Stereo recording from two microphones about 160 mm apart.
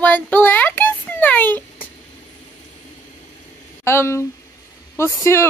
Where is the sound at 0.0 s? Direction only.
10° left (ahead or behind).